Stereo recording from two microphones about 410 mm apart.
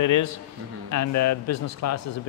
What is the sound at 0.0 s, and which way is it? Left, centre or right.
Speech, left.